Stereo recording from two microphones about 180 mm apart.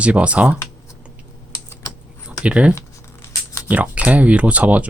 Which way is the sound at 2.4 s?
5° right (ahead or behind).